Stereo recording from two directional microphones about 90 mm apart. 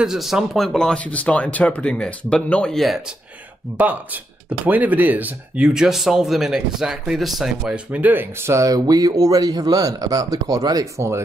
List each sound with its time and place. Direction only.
0.0 s speech: 5° right (ahead or behind)
0.7 s speech: 10° left (ahead or behind)
3.7 s speech: 20° right (ahead or behind)
5.7 s speech: 5° right (ahead or behind); by 10.9 s 45° right (ahead or behind)